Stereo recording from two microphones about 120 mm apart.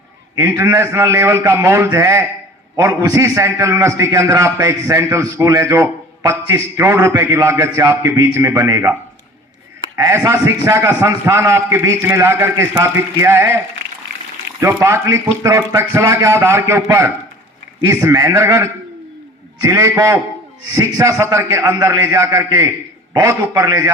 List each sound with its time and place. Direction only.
0.3 s a man's voice: 25° right (ahead or behind)
14.6 s a man's voice: 20° right (ahead or behind)